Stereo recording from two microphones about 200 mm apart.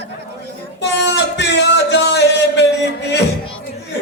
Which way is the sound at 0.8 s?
60° left (ahead or behind).